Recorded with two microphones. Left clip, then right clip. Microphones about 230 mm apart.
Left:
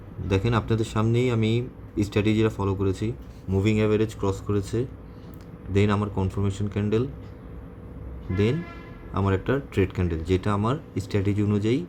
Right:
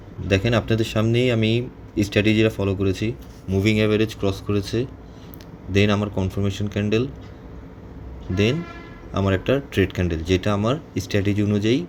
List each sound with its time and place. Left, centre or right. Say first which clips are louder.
0.3 s speech: right 5 dB; centre
9.1 s speech: right 4 dB; centre